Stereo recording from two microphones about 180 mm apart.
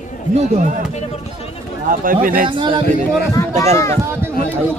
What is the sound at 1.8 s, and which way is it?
Speech, 50° right (ahead or behind).